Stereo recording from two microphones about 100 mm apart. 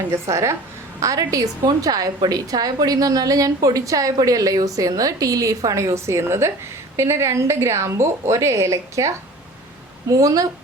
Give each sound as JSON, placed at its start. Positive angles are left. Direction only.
{"t": 0.1, "sound": "a woman's voice", "side_deg": -30}
{"t": 10.1, "sound": "a woman's voice", "side_deg": -35}